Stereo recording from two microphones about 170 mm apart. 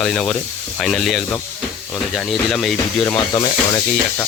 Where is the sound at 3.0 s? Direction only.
20° left (ahead or behind).